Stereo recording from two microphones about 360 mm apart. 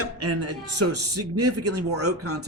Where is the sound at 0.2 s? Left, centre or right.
Right.